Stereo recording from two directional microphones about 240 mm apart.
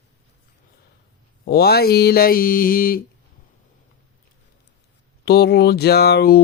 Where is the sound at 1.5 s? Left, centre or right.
Left.